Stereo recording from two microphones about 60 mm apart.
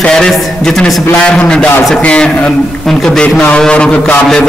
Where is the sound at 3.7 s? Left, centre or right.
Centre.